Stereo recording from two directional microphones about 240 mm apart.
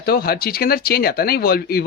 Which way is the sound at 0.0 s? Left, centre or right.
Left.